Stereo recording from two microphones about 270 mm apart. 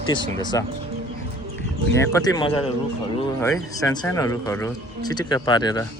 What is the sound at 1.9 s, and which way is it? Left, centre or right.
Speech, centre.